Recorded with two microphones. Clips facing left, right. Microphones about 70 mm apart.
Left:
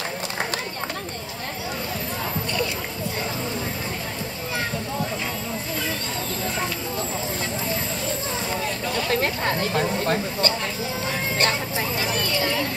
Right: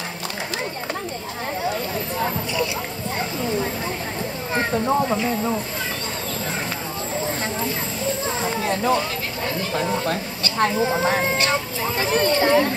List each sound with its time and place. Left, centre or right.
9.1 s speech: left
10.6 s speech: right